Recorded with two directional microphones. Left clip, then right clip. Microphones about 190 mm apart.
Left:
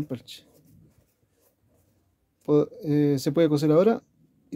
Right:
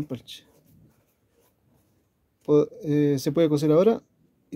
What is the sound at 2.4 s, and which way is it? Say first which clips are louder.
Speech: right 2 dB; centre (ahead or behind).